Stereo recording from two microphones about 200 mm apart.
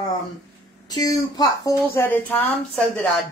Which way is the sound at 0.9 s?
20° left (ahead or behind).